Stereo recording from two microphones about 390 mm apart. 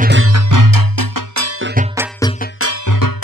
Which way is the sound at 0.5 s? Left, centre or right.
Right.